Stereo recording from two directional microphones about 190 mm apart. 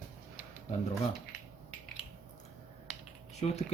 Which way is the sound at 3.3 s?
35° left (ahead or behind).